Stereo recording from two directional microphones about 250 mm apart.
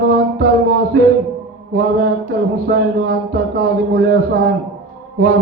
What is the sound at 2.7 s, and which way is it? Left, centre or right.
Speech, right.